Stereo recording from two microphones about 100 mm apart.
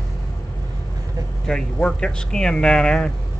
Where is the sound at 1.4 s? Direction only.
10° left (ahead or behind).